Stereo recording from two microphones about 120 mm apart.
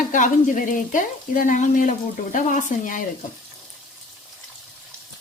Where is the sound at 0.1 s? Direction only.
90° left.